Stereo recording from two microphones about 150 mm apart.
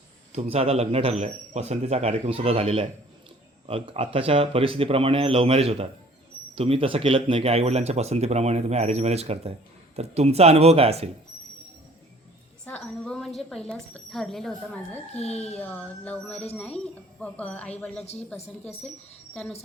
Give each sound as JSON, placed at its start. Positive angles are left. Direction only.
{"t": 0.3, "sound": "speech", "side_deg": -40}
{"t": 12.6, "sound": "speech", "side_deg": 10}
{"t": 15.1, "sound": "speech", "side_deg": 45}
{"t": 15.5, "sound": "a child's voice", "side_deg": 10}
{"t": 18.0, "sound": "speech", "side_deg": 45}
{"t": 18.6, "sound": "a child's voice", "side_deg": 15}